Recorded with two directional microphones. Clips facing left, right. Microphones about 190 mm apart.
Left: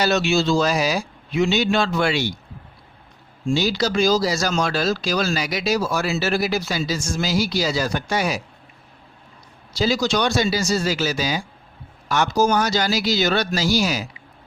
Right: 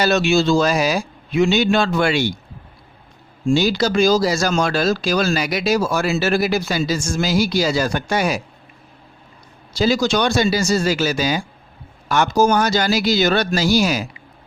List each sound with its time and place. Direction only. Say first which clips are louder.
0.0 s speech: right 3 dB; 55° right (ahead or behind)
3.4 s speech: right 4 dB; 55° right (ahead or behind)
9.7 s speech: right 3 dB; 55° right (ahead or behind)